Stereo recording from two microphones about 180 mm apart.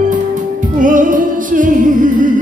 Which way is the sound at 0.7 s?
50° right (ahead or behind).